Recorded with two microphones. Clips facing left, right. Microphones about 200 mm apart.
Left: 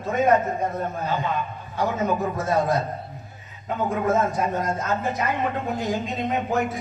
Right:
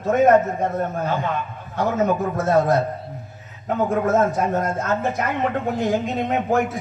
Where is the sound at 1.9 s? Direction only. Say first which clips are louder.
Right 6 dB; 50° right (ahead or behind).